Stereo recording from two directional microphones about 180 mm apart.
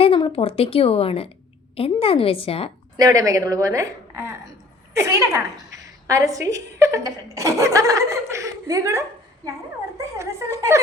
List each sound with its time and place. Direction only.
0.0 s a woman's voice: 30° left (ahead or behind)
3.0 s a woman's voice: 20° right (ahead or behind)